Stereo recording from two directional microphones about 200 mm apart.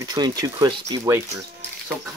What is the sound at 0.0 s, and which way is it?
Speech, 20° right (ahead or behind).